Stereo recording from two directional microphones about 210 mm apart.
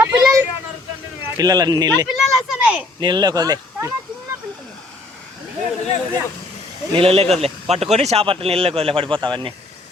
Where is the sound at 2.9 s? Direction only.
20° right (ahead or behind).